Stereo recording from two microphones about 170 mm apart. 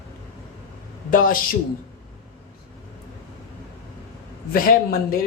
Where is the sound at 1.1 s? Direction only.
55° left (ahead or behind).